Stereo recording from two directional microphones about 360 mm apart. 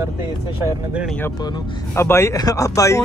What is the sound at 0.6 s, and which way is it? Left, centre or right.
Speech, centre.